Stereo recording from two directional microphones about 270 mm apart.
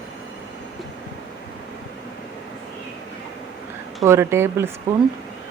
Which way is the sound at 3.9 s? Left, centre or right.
Centre.